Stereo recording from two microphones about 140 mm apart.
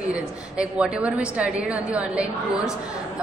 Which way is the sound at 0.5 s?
5° right (ahead or behind).